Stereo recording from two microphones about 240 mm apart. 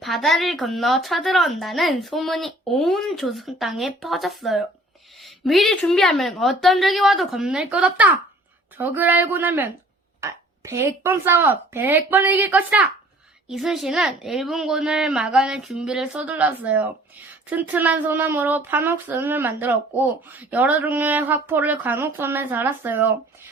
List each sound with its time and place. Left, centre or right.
0.0 s a woman's voice: centre